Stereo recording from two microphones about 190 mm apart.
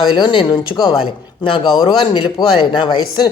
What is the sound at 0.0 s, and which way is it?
Speech, 25° left (ahead or behind).